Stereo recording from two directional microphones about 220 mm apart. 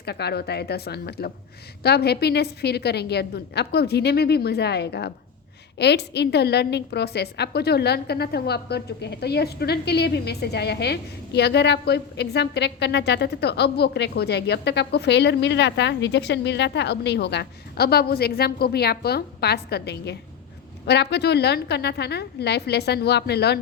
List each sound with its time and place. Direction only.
0.0 s a woman's voice: 50° left (ahead or behind)